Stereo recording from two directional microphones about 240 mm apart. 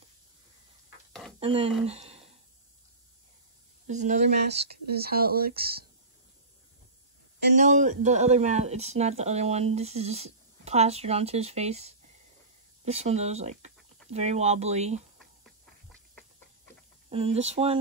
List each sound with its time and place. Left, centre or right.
1.4 s speech: right
3.8 s speech: right
4.5 s speech: right
7.3 s speech: right
7.6 s speech: right
15.1 s a sound: centre
17.1 s speech: right